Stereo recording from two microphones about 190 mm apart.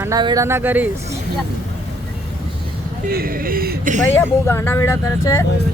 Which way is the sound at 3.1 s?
50° right (ahead or behind).